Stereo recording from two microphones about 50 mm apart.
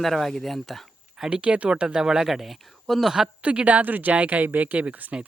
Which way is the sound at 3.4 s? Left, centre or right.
Right.